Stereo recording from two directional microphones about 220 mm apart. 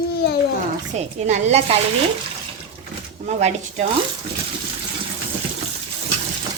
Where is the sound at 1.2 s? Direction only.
30° right (ahead or behind).